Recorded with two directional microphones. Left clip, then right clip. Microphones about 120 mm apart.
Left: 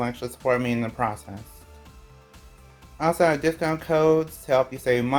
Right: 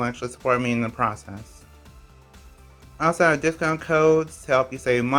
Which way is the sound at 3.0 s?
15° right (ahead or behind).